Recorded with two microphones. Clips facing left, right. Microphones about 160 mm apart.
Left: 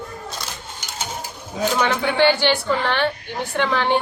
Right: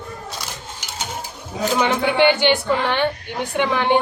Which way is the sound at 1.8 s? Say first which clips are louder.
Right 2 dB; 20° right (ahead or behind).